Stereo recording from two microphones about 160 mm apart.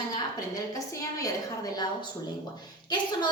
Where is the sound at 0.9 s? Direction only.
20° left (ahead or behind).